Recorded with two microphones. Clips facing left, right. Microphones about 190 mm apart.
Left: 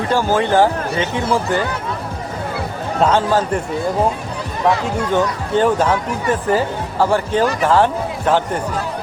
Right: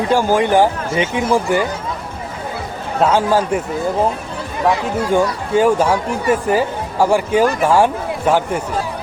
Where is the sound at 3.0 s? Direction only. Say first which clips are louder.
Right 1 dB; 10° right (ahead or behind).